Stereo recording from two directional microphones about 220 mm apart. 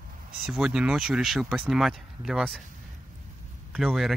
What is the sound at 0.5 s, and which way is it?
Speech, 5° right (ahead or behind).